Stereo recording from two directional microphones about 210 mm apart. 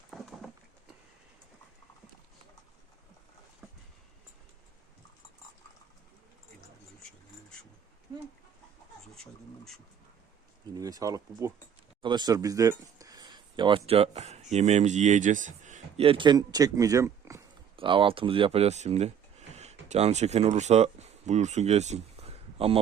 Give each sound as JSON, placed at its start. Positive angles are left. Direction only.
{"t": 0.1, "sound": "patter", "side_deg": 0}
{"t": 9.1, "sound": "a sound", "side_deg": 0}
{"t": 10.8, "sound": "a man's voice", "side_deg": -15}
{"t": 17.7, "sound": "speech", "side_deg": -25}